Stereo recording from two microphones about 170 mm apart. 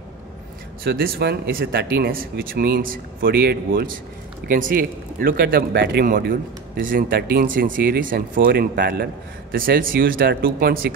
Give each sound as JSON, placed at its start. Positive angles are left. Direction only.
{"t": 0.8, "sound": "speech", "side_deg": -65}